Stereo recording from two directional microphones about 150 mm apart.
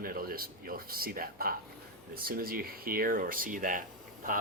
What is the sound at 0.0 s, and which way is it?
A man's voice, 75° right (ahead or behind).